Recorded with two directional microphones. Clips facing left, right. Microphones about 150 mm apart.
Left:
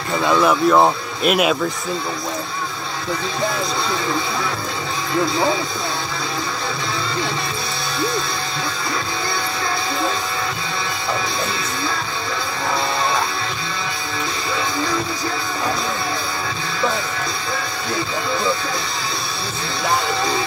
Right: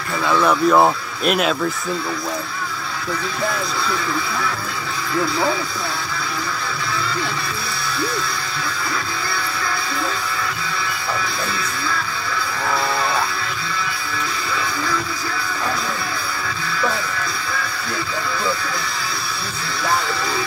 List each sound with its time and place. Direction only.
0.2 s speech: 20° left (ahead or behind)
0.5 s speech: centre (ahead or behind)
5.1 s speech: 25° left (ahead or behind)